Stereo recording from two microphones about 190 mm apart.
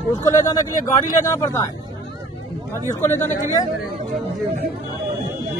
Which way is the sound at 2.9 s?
15° left (ahead or behind).